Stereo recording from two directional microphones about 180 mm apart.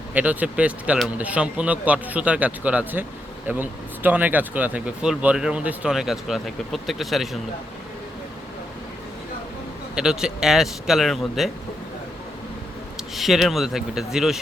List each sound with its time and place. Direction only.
0.1 s speech: 10° right (ahead or behind)
9.9 s speech: 5° right (ahead or behind)
13.1 s speech: centre (ahead or behind)